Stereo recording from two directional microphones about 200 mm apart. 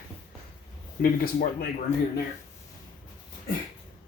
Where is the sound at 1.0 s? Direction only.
45° left (ahead or behind).